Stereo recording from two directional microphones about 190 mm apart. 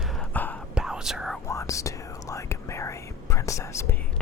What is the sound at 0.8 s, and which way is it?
Whispering, 5° right (ahead or behind).